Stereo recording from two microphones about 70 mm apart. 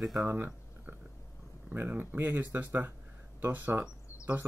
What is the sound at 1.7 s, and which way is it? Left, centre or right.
Speech, right.